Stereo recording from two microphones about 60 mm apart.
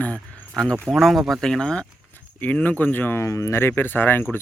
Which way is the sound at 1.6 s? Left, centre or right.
Centre.